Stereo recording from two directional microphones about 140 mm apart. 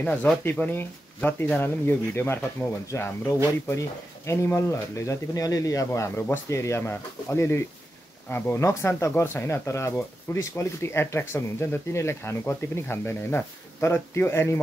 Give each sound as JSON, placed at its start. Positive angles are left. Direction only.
{"t": 0.0, "sound": "speech", "side_deg": 10}